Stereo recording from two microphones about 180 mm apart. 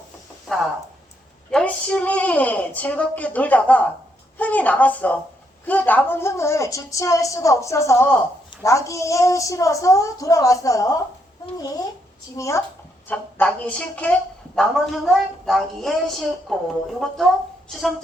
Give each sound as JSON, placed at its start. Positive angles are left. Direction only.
{"t": 0.4, "sound": "a woman's voice", "side_deg": 0}
{"t": 12.4, "sound": "a woman's voice", "side_deg": 15}
{"t": 17.7, "sound": "speech", "side_deg": 0}